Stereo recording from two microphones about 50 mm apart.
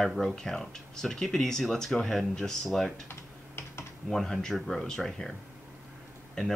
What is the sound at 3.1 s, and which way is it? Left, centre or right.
Typing, left.